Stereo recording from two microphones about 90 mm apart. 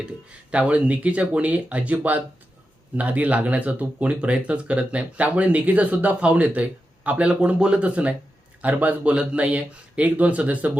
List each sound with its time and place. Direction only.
0.0 s speech: 15° right (ahead or behind)